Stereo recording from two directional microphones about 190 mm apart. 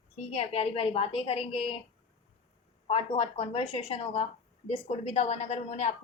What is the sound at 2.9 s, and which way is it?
Speech, 30° left (ahead or behind).